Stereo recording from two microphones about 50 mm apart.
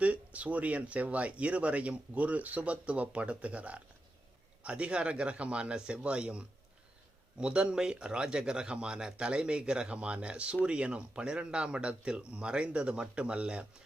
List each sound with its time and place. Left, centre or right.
0.0 s speech: right